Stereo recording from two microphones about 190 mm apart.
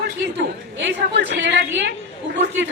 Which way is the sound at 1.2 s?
70° right (ahead or behind).